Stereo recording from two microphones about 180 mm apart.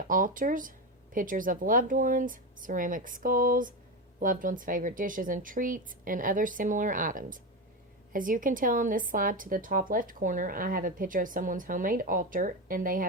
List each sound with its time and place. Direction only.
0.1 s speech: 50° right (ahead or behind)